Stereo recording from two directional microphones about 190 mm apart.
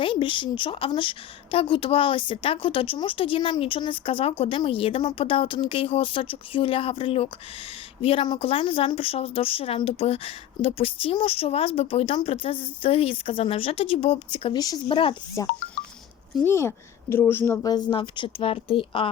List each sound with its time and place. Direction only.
0.0 s a woman's voice: 25° left (ahead or behind)